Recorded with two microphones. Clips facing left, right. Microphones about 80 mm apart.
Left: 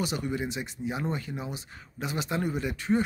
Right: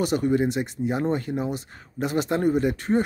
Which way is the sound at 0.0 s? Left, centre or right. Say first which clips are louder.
Right 9 dB; right.